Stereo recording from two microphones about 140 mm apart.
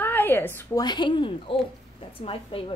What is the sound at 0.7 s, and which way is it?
A woman's voice, 30° left (ahead or behind).